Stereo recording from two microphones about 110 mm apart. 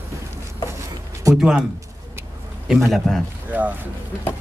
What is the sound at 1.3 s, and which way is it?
Speech, 5° right (ahead or behind).